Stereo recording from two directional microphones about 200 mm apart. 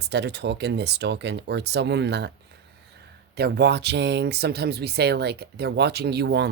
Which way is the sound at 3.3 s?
55° right (ahead or behind).